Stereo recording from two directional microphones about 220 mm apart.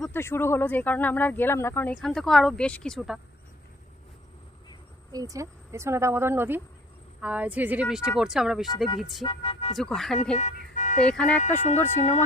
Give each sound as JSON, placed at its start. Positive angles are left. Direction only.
{"t": 0.0, "sound": "speech", "side_deg": 10}
{"t": 5.1, "sound": "speech", "side_deg": -15}
{"t": 9.2, "sound": "speech", "side_deg": 25}
{"t": 9.8, "sound": "speech", "side_deg": 0}
{"t": 10.3, "sound": "vehicle", "side_deg": 35}
{"t": 11.0, "sound": "speech", "side_deg": 5}